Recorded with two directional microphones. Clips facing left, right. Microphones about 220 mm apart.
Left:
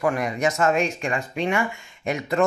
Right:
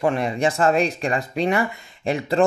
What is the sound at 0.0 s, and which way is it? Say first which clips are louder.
Speech: right 2 dB; 30° right (ahead or behind).